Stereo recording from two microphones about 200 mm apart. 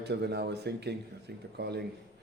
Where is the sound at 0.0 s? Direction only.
55° right (ahead or behind).